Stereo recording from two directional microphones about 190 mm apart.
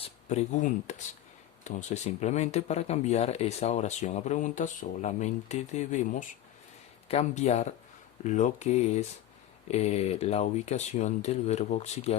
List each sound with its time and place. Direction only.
0.3 s speech: 40° left (ahead or behind)